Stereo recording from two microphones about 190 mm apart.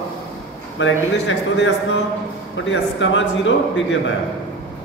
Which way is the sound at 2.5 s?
75° left (ahead or behind).